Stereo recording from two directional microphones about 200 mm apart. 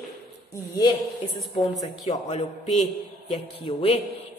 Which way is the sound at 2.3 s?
30° left (ahead or behind).